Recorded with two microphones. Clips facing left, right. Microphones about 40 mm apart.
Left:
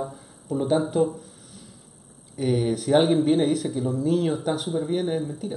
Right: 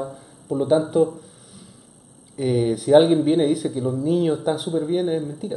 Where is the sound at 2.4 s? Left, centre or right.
Centre.